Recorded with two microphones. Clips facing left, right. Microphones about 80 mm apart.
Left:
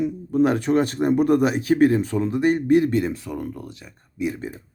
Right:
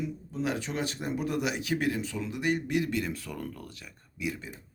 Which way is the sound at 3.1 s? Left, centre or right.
Left.